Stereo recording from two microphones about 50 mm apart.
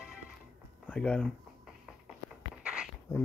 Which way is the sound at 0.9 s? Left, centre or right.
Centre.